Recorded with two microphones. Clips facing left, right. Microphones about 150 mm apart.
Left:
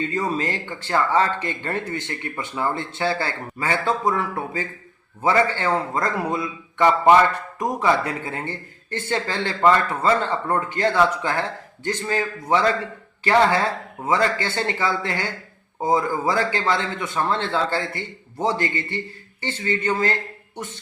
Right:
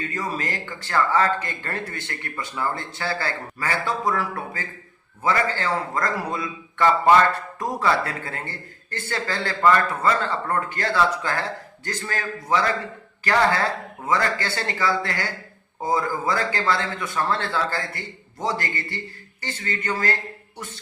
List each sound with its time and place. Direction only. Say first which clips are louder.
0.0 s a man's voice: left 5 dB; 25° left (ahead or behind)